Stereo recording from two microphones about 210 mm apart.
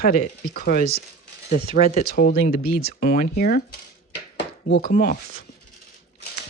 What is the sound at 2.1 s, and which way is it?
Speech, 45° left (ahead or behind).